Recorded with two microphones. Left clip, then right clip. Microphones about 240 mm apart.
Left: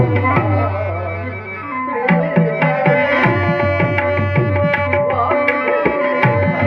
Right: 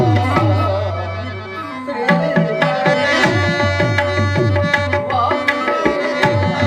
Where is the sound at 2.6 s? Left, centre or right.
Left.